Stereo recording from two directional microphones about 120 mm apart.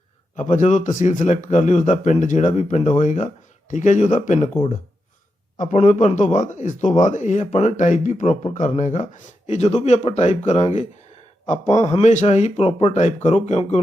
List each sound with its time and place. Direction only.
0.3 s a man's voice: 90° left
5.5 s speech: 80° left
11.4 s a man's voice: 90° left
11.8 s a man's voice: 55° left (ahead or behind)
12.1 s speech: 70° left (ahead or behind)